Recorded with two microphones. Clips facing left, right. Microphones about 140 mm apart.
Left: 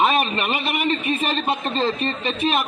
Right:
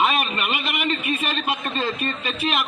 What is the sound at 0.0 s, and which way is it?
A man's voice, 30° left (ahead or behind).